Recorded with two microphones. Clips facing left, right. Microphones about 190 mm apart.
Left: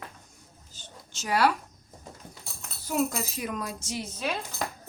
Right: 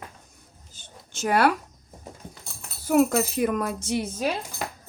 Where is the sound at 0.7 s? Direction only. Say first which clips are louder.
Right 8 dB; 55° right (ahead or behind).